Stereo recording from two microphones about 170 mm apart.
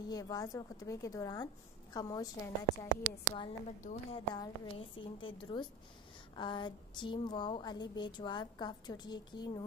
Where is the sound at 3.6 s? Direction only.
50° left (ahead or behind).